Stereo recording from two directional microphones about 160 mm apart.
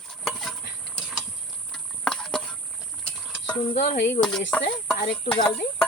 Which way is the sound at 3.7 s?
90° left.